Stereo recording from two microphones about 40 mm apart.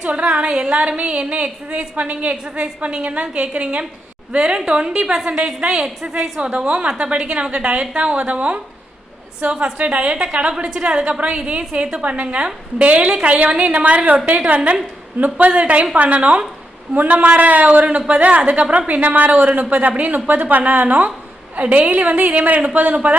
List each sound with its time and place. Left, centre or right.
0.0 s a woman's voice: right
6.0 s a woman's voice: centre
6.4 s a woman's voice: right